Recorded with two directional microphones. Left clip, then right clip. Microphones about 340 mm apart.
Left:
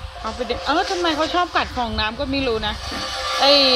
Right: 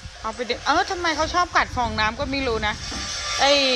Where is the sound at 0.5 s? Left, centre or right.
Centre.